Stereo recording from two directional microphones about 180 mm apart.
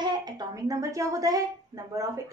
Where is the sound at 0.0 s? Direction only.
20° right (ahead or behind).